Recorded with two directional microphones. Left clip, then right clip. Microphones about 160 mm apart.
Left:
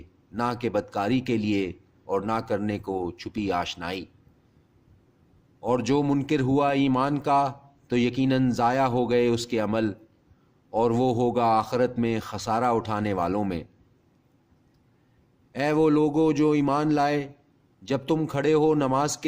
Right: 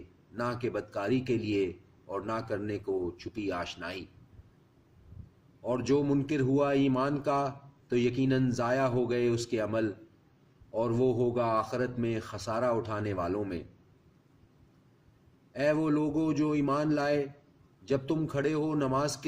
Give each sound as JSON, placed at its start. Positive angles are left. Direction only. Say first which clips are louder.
{"t": 0.3, "sound": "speech", "louder": "left 7 dB", "side_deg": 55}
{"t": 5.6, "sound": "a man's voice", "louder": "left 5 dB", "side_deg": 55}
{"t": 15.5, "sound": "speech", "louder": "left 6 dB", "side_deg": 55}